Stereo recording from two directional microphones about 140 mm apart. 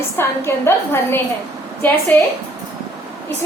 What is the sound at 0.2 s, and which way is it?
Speech, 15° left (ahead or behind).